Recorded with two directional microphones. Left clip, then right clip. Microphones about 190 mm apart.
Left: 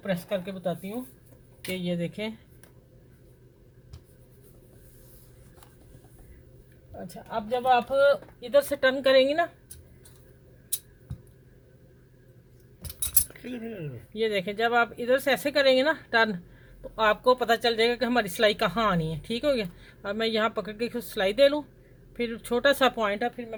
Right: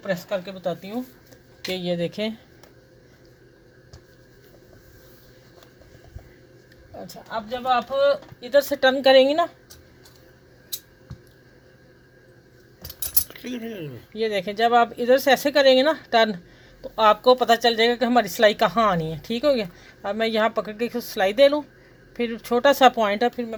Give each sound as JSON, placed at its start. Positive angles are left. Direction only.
{"t": 0.0, "sound": "a woman's voice", "side_deg": 0}
{"t": 7.1, "sound": "speech", "side_deg": -5}
{"t": 13.3, "sound": "speech", "side_deg": 0}
{"t": 23.0, "sound": "a woman's voice", "side_deg": -15}